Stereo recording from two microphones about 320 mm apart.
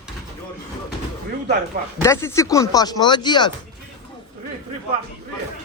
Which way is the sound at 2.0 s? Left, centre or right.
Centre.